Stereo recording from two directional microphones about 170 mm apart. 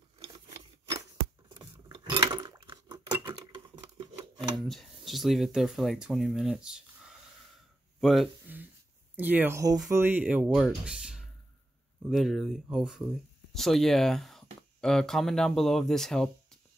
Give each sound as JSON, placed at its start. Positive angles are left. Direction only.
{"t": 1.5, "sound": "a sound", "side_deg": -25}
{"t": 2.1, "sound": "patter", "side_deg": -25}
{"t": 4.6, "sound": "speech", "side_deg": 0}
{"t": 8.5, "sound": "speech", "side_deg": -10}